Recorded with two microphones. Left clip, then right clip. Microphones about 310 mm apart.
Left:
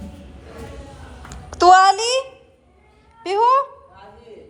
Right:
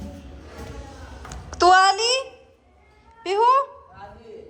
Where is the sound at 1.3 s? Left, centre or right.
Centre.